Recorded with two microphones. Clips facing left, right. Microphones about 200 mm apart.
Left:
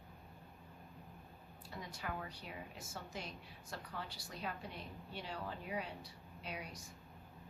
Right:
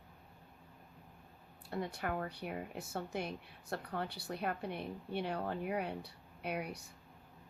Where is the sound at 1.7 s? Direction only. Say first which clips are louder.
Right 8 dB; 60° right (ahead or behind).